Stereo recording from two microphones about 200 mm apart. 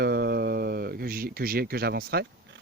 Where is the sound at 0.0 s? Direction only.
50° right (ahead or behind).